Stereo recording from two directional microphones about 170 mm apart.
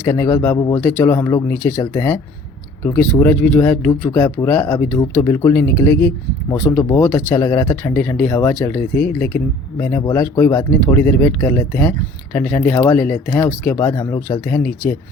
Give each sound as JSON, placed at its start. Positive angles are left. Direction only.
{"t": 0.0, "sound": "speech", "side_deg": 15}